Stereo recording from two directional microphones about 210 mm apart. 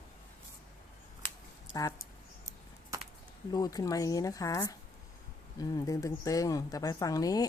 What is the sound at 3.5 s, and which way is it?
Speech, 20° left (ahead or behind).